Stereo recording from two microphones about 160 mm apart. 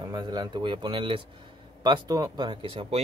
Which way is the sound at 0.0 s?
25° right (ahead or behind).